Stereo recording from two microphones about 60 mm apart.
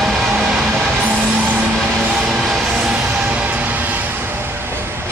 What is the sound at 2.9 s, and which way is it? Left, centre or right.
Music, right.